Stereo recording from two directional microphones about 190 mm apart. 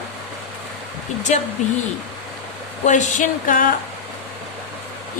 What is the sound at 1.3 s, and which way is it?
Speech, 40° left (ahead or behind).